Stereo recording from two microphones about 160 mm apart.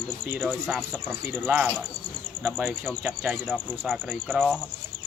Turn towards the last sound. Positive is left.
turn(degrees=-10)  # may be behind; listen again after turning